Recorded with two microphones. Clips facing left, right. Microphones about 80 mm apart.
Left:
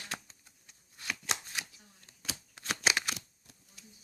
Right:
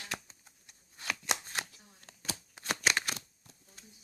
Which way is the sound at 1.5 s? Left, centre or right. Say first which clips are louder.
Right 3 dB; right.